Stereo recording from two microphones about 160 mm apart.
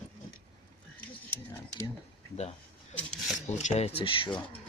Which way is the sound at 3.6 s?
45° left (ahead or behind).